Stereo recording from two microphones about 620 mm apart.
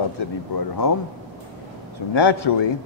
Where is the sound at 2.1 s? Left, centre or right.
Left.